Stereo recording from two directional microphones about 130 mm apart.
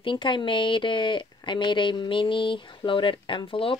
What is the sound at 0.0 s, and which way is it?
Speech, 40° left (ahead or behind).